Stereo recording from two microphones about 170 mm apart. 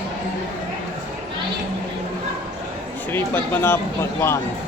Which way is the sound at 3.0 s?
10° left (ahead or behind).